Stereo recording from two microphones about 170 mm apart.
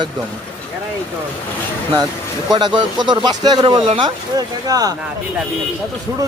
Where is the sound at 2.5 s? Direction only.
25° right (ahead or behind).